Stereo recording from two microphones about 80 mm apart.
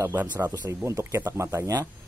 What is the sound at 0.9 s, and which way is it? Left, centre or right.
Speech, right.